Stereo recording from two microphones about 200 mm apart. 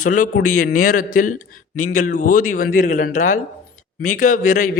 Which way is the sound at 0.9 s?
45° left (ahead or behind).